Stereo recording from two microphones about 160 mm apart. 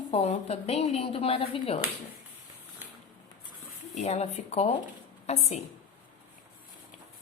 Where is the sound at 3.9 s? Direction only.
45° left (ahead or behind).